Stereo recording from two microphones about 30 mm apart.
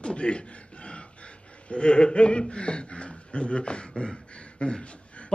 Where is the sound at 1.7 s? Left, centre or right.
Left.